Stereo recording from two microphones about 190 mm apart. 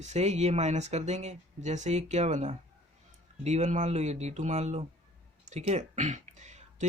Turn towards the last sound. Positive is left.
turn(degrees=-40)  # may be behind; listen again after turning